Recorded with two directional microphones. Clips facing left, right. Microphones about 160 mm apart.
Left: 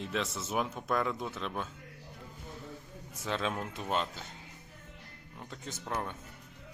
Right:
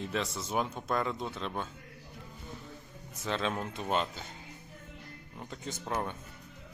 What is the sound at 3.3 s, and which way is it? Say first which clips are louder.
Speech: right 1 dB; 5° left (ahead or behind).